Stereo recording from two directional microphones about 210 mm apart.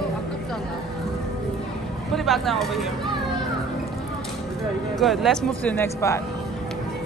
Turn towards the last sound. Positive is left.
turn(degrees=10)  # may be behind; listen again after turning